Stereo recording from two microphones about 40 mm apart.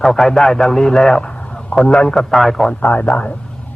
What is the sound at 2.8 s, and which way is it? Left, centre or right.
Speech, left.